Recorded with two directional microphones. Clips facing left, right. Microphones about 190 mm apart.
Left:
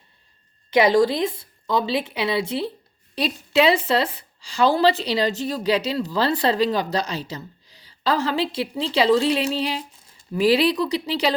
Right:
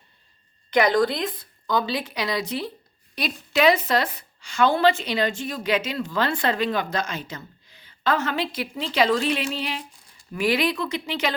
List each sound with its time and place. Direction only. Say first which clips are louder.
0.9 s a woman's voice: left 4 dB; 25° left (ahead or behind)